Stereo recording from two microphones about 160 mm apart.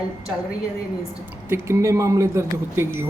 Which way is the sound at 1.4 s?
15° right (ahead or behind).